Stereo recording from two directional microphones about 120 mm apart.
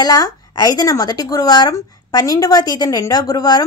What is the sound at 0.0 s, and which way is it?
A woman's voice, 30° left (ahead or behind).